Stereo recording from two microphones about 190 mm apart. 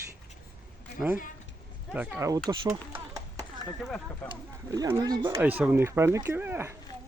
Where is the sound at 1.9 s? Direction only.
10° right (ahead or behind).